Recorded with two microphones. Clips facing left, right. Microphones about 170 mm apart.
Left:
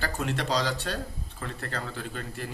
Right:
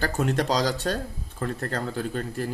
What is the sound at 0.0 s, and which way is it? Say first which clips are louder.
Speech: right 6 dB; 45° right (ahead or behind).